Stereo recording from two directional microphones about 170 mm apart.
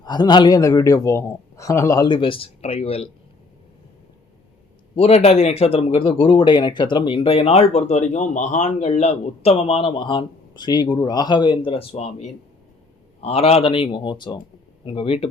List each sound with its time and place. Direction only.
0.0 s a man's voice: 25° left (ahead or behind)
2.0 s speech: 30° left (ahead or behind)
4.9 s speech: 35° left (ahead or behind)
13.2 s speech: 35° left (ahead or behind)